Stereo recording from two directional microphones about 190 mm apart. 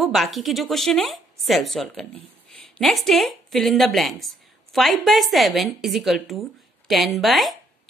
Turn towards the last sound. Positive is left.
turn(degrees=0)  # may be behind; listen again after turning